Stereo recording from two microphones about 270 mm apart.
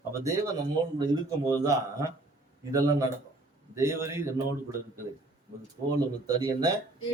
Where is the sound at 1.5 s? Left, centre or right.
Centre.